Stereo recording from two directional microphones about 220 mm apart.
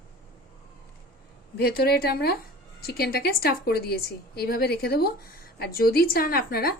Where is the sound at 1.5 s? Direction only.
45° left (ahead or behind).